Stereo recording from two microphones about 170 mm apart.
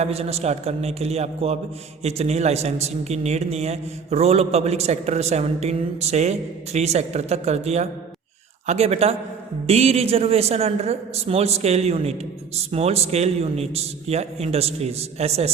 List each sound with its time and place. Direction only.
0.0 s a man's voice: 40° right (ahead or behind)